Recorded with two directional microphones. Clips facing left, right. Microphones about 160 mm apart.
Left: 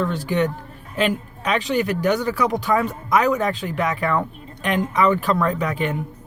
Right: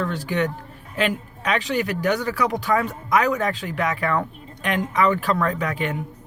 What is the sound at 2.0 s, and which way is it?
Speech, 25° left (ahead or behind).